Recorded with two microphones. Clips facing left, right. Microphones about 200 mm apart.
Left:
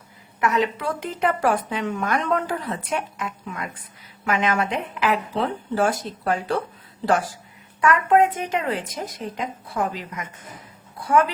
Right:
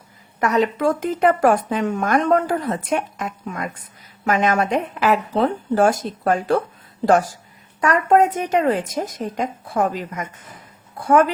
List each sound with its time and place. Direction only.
0.3 s a woman's voice: 40° right (ahead or behind)